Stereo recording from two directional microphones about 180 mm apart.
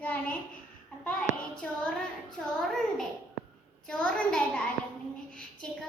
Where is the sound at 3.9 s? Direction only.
5° left (ahead or behind).